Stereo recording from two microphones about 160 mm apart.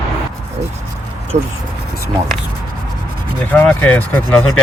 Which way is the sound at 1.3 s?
45° right (ahead or behind).